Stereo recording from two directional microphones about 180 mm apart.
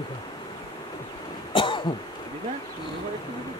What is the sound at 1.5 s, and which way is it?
Cough, 25° left (ahead or behind).